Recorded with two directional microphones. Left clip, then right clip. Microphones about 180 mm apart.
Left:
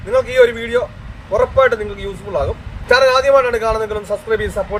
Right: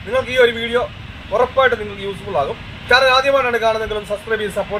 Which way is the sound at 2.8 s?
25° left (ahead or behind).